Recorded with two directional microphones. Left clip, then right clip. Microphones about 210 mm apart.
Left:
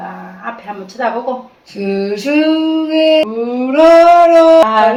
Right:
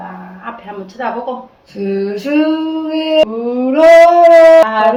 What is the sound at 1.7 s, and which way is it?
Speech, 5° right (ahead or behind).